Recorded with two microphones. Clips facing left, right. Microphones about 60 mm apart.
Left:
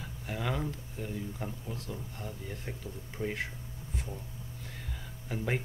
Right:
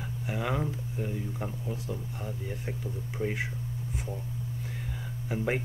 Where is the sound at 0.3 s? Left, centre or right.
Centre.